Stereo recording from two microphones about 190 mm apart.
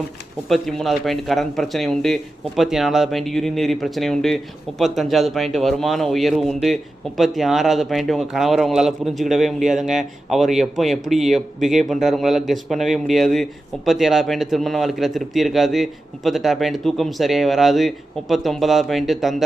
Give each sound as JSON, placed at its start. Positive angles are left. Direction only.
{"t": 0.4, "sound": "speech", "side_deg": 0}